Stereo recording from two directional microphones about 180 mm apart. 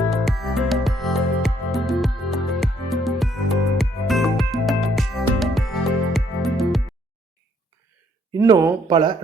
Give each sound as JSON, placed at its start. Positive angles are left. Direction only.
{"t": 0.1, "sound": "music", "side_deg": 0}
{"t": 8.3, "sound": "a sound", "side_deg": -20}
{"t": 8.9, "sound": "speech", "side_deg": -25}